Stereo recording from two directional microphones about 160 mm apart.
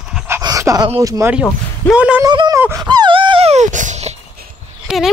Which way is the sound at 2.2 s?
25° right (ahead or behind).